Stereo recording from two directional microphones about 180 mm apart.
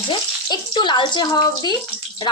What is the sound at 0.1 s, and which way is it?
Speech, 25° left (ahead or behind).